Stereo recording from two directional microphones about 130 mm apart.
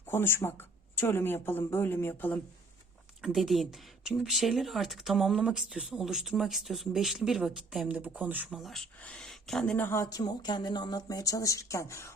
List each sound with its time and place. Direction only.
0.1 s speech: 15° left (ahead or behind)
3.2 s speech: centre (ahead or behind)
8.4 s speech: centre (ahead or behind)
9.8 s speech: 20° left (ahead or behind)